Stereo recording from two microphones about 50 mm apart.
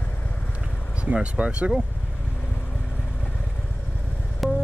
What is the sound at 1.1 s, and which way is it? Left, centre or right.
Speech, right.